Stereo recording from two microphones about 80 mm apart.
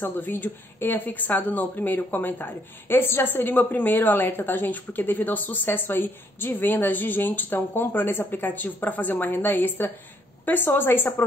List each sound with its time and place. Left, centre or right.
0.0 s speech: left